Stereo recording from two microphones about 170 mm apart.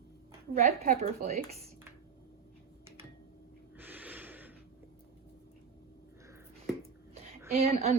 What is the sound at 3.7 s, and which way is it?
Gasp, 10° right (ahead or behind).